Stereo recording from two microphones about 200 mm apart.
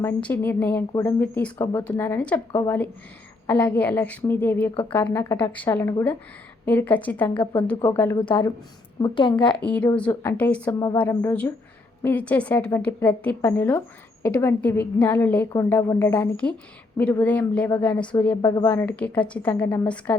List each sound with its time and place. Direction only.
0.0 s a woman's voice: 10° left (ahead or behind)
4.7 s a woman's voice: 25° left (ahead or behind)
4.9 s a woman's voice: 10° left (ahead or behind)
8.2 s a woman's voice: 25° left (ahead or behind)
9.6 s a woman's voice: 5° left (ahead or behind)